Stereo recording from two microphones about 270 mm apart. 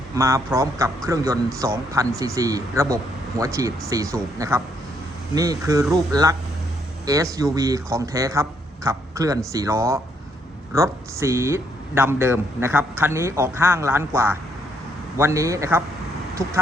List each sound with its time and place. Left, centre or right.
0.1 s a man's voice: centre
7.0 s a man's voice: centre